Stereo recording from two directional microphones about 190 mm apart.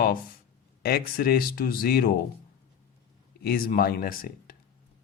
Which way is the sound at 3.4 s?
55° left (ahead or behind).